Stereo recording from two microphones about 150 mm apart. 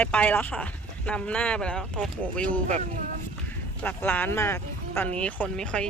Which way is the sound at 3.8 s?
10° left (ahead or behind).